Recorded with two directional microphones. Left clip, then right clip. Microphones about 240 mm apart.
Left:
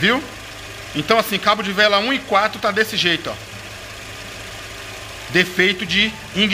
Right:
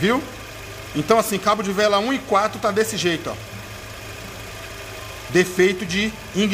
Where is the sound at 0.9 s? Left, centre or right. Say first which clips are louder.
Left 1 dB; centre.